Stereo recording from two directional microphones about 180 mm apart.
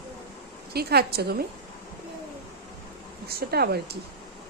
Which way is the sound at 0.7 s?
60° right (ahead or behind).